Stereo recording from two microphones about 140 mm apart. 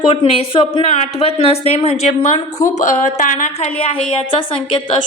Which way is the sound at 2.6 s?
65° left (ahead or behind).